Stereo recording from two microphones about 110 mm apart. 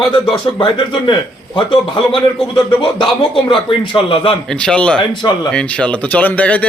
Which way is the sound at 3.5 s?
55° left (ahead or behind).